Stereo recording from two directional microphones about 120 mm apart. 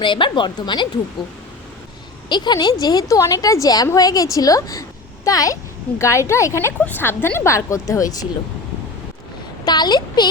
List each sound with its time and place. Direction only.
0.0 s speech: 40° left (ahead or behind)
2.3 s a woman's voice: 40° left (ahead or behind)
9.6 s speech: 35° left (ahead or behind)